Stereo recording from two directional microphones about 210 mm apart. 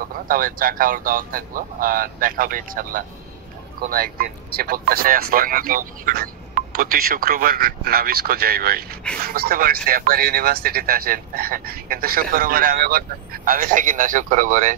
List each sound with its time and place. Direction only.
0.3 s speech: 40° right (ahead or behind)